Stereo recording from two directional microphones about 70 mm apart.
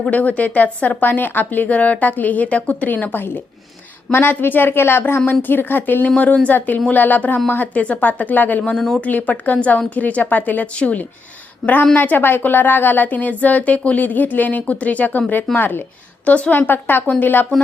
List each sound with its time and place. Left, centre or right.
0.1 s a woman's voice: left